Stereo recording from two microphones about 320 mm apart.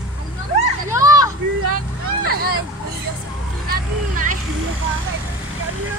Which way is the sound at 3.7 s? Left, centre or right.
Right.